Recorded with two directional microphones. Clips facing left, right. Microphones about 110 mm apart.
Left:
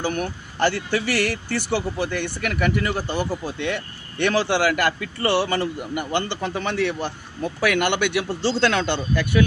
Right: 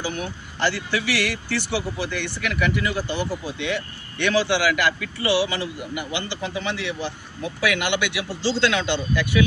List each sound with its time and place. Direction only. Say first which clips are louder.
0.0 s speech: left 4 dB; 55° left (ahead or behind)